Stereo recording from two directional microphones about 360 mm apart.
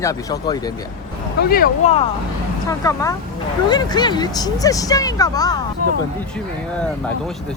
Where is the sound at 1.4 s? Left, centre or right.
Left.